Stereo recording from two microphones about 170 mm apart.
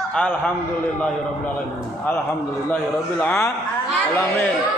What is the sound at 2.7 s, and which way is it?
Speech, 5° left (ahead or behind).